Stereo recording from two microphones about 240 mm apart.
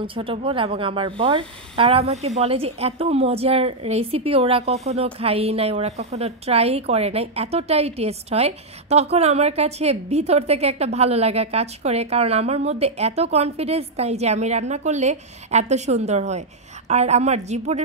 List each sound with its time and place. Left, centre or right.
0.0 s speech: right